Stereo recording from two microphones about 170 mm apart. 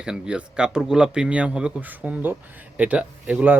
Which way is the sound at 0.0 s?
5° right (ahead or behind).